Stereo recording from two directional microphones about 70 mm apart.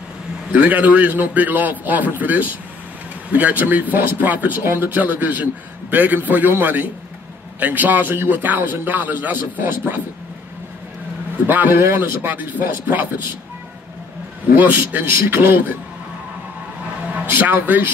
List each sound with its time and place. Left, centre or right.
0.5 s speech: right
11.4 s speech: right
11.8 s a man's voice: right
12.2 s speech: right
14.5 s a man's voice: right
17.3 s speech: right